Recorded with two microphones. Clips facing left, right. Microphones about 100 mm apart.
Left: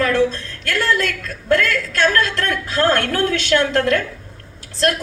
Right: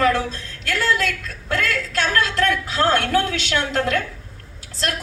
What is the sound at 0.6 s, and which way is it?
A woman's voice, 50° left (ahead or behind).